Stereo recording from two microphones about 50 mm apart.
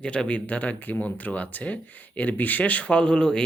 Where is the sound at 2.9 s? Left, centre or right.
Centre.